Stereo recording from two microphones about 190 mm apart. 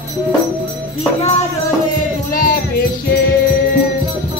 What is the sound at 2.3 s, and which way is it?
Music, 50° left (ahead or behind).